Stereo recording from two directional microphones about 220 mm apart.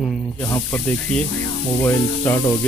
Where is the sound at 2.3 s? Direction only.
10° left (ahead or behind).